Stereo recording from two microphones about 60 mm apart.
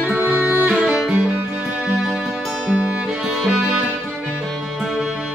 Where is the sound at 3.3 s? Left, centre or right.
Centre.